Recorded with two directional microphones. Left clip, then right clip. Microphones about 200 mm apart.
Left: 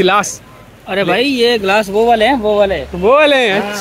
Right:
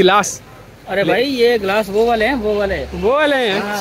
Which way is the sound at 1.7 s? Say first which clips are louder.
Left 4 dB; 40° left (ahead or behind).